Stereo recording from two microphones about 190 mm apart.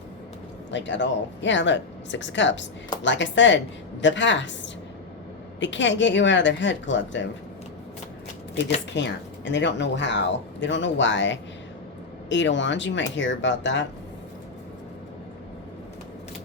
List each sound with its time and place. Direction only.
0.7 s speech: 70° left (ahead or behind)
9.0 s speech: 70° left (ahead or behind)